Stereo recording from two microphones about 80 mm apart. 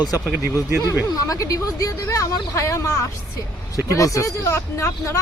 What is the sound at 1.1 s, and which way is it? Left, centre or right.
Speech, left.